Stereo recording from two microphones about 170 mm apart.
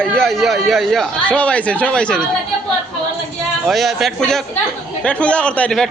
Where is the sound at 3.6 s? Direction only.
Centre (ahead or behind).